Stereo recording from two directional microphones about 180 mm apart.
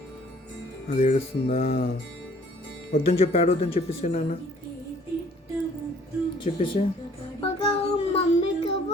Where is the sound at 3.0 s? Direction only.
35° left (ahead or behind).